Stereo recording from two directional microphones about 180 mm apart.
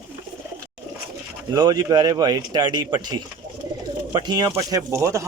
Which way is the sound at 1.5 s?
20° right (ahead or behind).